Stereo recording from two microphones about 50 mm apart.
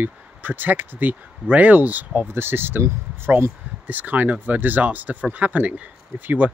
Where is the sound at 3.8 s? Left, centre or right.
Right.